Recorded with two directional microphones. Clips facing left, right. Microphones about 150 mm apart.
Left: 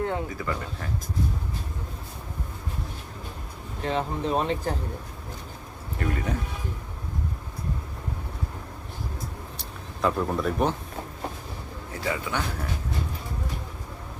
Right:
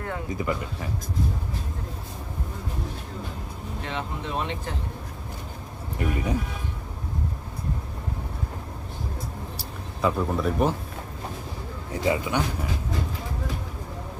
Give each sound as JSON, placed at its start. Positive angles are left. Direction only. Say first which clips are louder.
{"t": 0.3, "sound": "speech", "louder": "right 3 dB", "side_deg": -15}
{"t": 3.8, "sound": "speech", "louder": "left 7 dB", "side_deg": 35}
{"t": 6.0, "sound": "speech", "louder": "right 2 dB", "side_deg": -15}
{"t": 10.0, "sound": "speech", "louder": "right 1 dB", "side_deg": 0}
{"t": 11.9, "sound": "a man's voice", "louder": "right 5 dB", "side_deg": -20}